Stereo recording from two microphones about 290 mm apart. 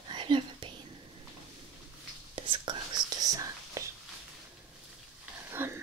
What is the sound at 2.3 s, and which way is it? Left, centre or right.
Whispering, centre.